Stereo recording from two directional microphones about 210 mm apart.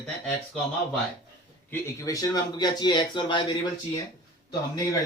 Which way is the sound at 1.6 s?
15° left (ahead or behind).